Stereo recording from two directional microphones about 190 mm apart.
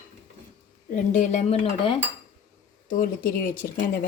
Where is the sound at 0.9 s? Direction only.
40° left (ahead or behind).